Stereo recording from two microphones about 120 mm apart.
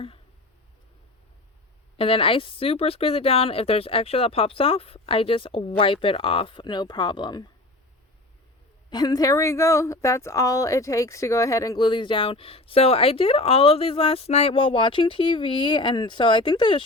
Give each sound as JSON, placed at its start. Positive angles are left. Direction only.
{"t": 2.0, "sound": "speech", "side_deg": 50}
{"t": 8.9, "sound": "a woman's voice", "side_deg": 35}
{"t": 11.9, "sound": "speech", "side_deg": 45}